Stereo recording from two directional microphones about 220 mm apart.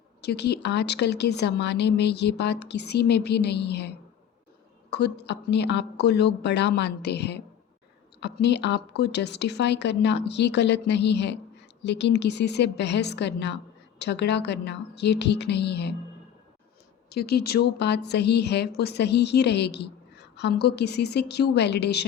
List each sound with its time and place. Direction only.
0.2 s speech: 50° left (ahead or behind)
17.1 s speech: 45° left (ahead or behind)